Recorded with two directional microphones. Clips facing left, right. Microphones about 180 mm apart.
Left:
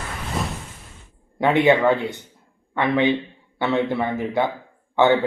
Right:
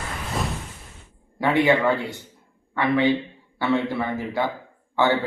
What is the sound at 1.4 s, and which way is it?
Speech, 20° left (ahead or behind).